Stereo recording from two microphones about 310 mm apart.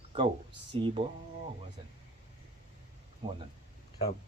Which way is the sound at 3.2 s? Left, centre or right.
Centre.